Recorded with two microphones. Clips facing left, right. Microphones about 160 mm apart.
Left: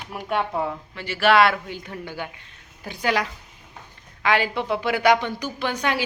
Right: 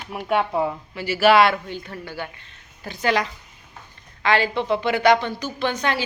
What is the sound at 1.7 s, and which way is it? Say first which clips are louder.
A woman's voice: right 1 dB; 15° left (ahead or behind).